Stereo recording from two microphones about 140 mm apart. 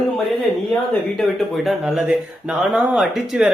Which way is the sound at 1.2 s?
Centre (ahead or behind).